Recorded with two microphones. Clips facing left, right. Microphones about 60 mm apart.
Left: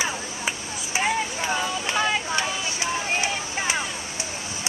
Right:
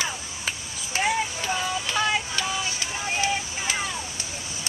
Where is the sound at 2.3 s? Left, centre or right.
Left.